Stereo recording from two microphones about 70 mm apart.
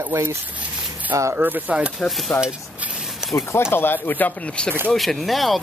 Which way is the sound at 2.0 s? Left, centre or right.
Centre.